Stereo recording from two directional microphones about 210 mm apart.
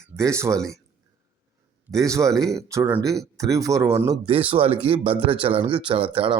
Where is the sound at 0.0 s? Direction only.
15° right (ahead or behind).